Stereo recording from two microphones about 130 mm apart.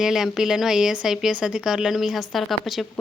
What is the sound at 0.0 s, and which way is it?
Speech, 5° right (ahead or behind).